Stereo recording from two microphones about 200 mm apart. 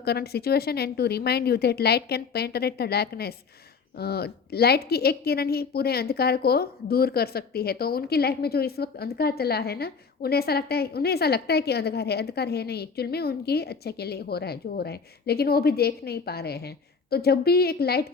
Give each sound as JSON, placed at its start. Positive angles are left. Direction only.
{"t": 0.0, "sound": "a woman's voice", "side_deg": 55}